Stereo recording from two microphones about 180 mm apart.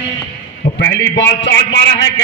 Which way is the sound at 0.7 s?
75° left (ahead or behind).